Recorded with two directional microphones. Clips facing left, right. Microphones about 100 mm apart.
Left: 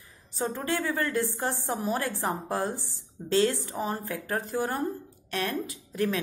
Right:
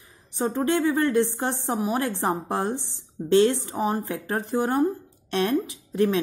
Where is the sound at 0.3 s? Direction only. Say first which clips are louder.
Right 6 dB; 20° right (ahead or behind).